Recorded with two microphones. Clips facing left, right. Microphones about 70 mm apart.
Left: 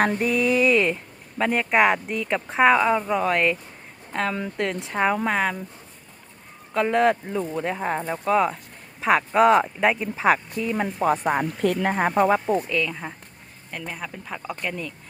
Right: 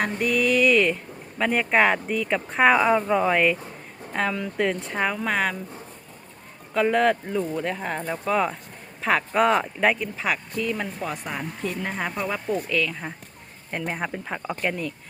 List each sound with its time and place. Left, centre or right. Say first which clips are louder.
0.2 s music: even; left
0.7 s speech: even; centre
6.7 s speech: even; centre
10.2 s speech: left 8 dB; left
10.6 s music: left 2 dB; left
11.0 s speech: left 9 dB; left
11.6 s speech: left 7 dB; left
11.9 s speech: left 10 dB; left
12.5 s speech: left 2 dB; centre
13.7 s speech: right 5 dB; right